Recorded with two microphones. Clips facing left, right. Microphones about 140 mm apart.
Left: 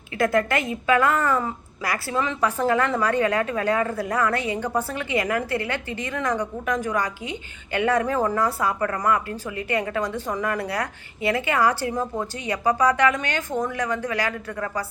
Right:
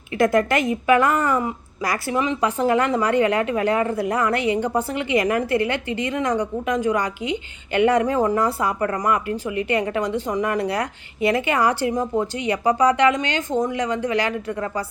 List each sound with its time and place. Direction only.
0.2 s a woman's voice: 20° right (ahead or behind)